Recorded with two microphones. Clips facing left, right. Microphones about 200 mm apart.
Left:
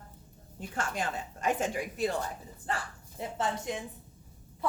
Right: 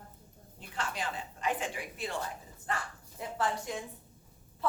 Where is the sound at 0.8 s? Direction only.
45° left (ahead or behind).